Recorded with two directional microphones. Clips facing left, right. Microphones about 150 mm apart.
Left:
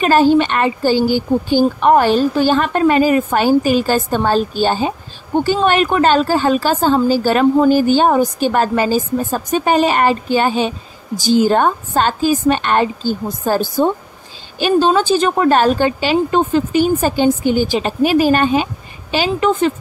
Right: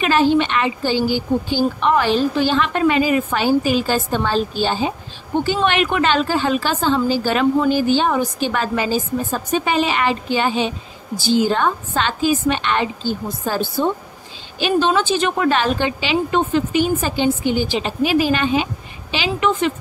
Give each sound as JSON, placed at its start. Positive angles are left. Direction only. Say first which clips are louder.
{"t": 0.0, "sound": "a woman's voice", "louder": "left 4 dB", "side_deg": 45}